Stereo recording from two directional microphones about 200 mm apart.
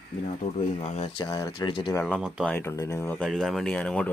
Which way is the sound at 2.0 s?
Centre (ahead or behind).